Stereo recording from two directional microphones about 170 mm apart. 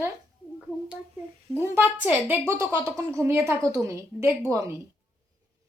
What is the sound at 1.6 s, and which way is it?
A woman's voice, 15° right (ahead or behind).